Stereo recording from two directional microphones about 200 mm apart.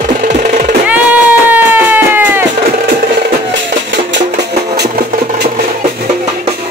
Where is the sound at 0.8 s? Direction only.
5° right (ahead or behind).